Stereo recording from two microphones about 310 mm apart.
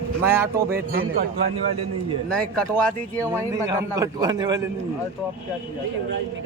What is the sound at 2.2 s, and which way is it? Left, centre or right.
A man's voice, centre.